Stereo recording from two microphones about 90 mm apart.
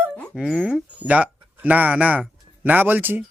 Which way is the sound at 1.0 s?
15° right (ahead or behind).